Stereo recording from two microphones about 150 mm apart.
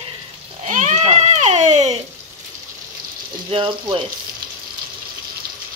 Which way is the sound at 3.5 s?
35° right (ahead or behind).